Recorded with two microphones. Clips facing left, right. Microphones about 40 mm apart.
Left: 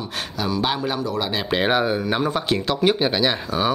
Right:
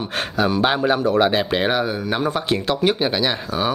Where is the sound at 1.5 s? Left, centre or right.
Centre.